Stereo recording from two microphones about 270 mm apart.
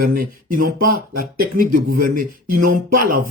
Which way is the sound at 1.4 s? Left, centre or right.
Right.